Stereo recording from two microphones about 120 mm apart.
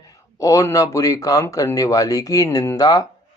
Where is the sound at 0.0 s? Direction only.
30° left (ahead or behind).